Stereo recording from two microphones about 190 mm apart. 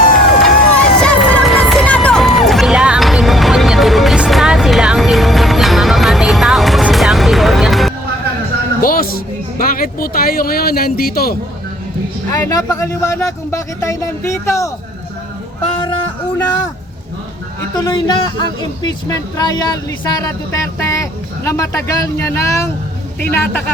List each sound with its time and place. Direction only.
0.4 s run: 5° left (ahead or behind)
8.8 s a sound: 50° left (ahead or behind)
12.3 s speech: 20° left (ahead or behind)
17.7 s speech: 20° left (ahead or behind)